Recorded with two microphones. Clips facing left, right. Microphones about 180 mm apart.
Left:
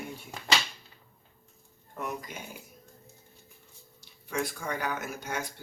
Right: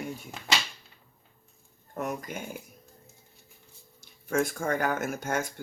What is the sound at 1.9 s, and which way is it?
Speech, 45° right (ahead or behind).